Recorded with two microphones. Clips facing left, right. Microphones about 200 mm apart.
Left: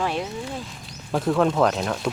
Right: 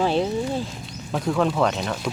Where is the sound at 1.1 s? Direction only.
Centre (ahead or behind).